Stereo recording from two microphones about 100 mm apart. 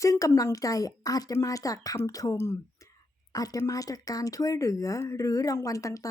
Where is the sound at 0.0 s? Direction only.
30° left (ahead or behind).